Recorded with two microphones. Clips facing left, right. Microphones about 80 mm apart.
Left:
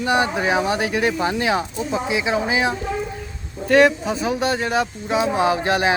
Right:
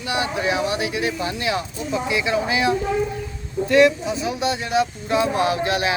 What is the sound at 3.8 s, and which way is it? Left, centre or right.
Speech, left.